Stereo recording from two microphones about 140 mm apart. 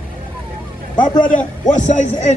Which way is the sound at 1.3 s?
10° left (ahead or behind).